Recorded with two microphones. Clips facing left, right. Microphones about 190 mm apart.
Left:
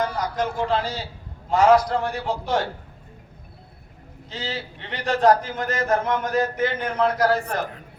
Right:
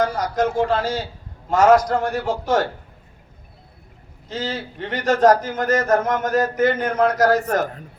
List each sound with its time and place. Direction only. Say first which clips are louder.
0.0 s a man's voice: right 4 dB; 45° right (ahead or behind)
4.3 s a man's voice: right 5 dB; 45° right (ahead or behind)